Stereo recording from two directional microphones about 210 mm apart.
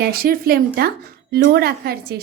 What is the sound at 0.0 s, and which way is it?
A woman's voice, 45° right (ahead or behind).